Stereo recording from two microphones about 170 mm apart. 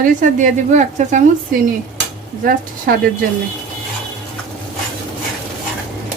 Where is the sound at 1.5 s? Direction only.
55° right (ahead or behind).